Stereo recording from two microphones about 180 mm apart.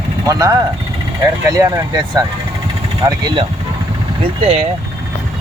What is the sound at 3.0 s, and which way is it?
Speech, 20° right (ahead or behind).